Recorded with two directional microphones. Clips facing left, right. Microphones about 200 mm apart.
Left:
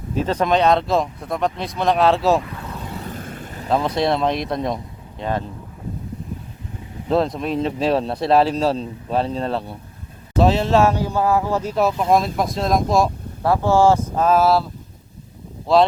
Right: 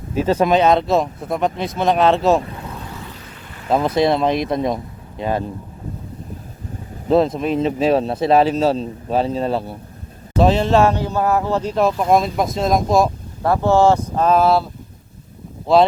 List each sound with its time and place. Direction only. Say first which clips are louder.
0.1 s speech: right 3 dB; 5° right (ahead or behind)
3.0 s vehicle: left 5 dB; 50° left (ahead or behind)
3.7 s speech: right 3 dB; 5° right (ahead or behind)
7.1 s speech: right 4 dB; centre (ahead or behind)
15.6 s speech: right 2 dB; centre (ahead or behind)